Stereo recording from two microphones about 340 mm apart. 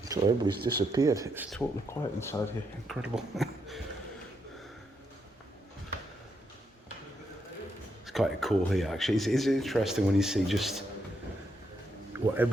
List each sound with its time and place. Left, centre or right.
0.0 s speech: centre
8.0 s speech: centre
12.1 s speech: centre